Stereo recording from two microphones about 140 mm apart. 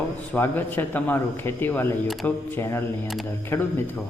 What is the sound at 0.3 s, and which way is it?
A man's voice, 15° left (ahead or behind).